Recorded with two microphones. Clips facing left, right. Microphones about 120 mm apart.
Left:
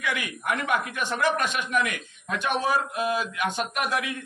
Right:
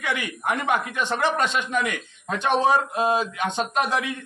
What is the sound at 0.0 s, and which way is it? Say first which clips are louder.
A man's voice: right 3 dB; 25° right (ahead or behind).